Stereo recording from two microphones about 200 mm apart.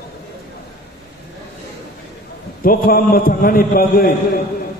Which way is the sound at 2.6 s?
45° left (ahead or behind).